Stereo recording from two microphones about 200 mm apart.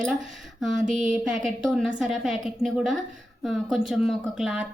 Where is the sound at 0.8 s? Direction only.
40° right (ahead or behind).